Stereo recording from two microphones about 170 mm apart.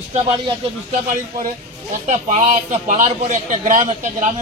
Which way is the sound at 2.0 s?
45° right (ahead or behind).